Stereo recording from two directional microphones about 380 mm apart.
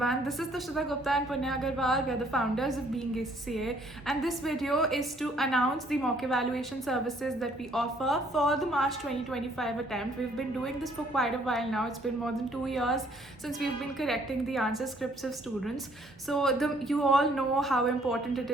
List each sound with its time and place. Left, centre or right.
0.0 s a woman's voice: centre